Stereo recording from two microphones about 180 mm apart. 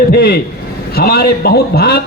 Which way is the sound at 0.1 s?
60° left (ahead or behind).